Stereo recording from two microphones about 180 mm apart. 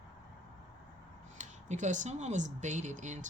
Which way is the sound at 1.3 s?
45° right (ahead or behind).